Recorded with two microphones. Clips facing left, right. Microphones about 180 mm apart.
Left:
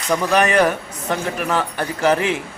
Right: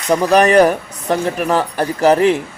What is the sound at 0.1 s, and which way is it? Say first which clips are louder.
Speech: right 6 dB; 40° right (ahead or behind).